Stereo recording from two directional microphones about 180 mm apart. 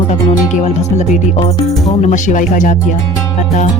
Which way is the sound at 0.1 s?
40° left (ahead or behind).